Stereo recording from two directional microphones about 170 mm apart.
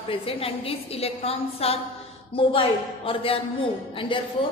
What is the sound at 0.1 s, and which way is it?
A woman's voice, 35° left (ahead or behind).